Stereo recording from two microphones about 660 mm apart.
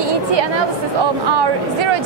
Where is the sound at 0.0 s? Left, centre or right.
Right.